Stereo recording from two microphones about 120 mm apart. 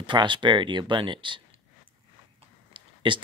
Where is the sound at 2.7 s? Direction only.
45° right (ahead or behind).